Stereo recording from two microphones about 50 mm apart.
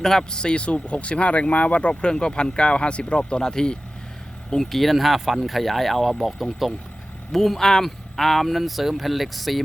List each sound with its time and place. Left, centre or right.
0.0 s speech: centre
4.5 s speech: centre